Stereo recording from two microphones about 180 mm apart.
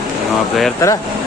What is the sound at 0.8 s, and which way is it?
Speech, 15° left (ahead or behind).